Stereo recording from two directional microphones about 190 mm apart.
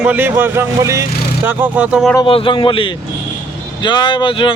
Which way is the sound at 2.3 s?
30° left (ahead or behind).